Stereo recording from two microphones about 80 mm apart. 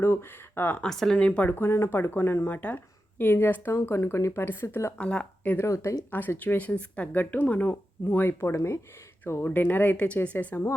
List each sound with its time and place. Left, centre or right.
0.0 s speech: left
0.8 s speech: centre
1.5 s speech: left
4.9 s speech: centre
5.6 s speech: left
6.1 s speech: left